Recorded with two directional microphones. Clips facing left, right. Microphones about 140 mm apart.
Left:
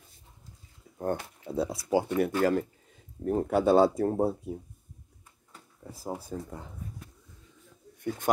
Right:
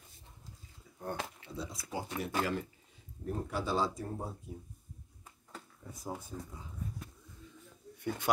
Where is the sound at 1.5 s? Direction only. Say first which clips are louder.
Left 18 dB; 65° left (ahead or behind).